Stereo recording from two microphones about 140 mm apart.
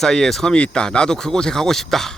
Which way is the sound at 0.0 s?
5° left (ahead or behind).